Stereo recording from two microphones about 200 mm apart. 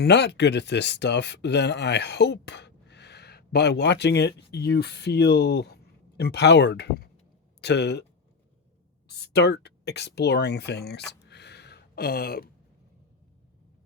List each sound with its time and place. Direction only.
0.0 s speech: 55° left (ahead or behind)
9.0 s speech: 55° left (ahead or behind)
11.1 s a sound: 55° left (ahead or behind)